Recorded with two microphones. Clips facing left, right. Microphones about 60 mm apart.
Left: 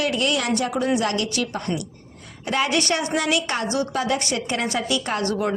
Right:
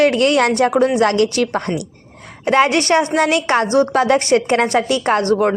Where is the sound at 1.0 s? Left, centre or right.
Right.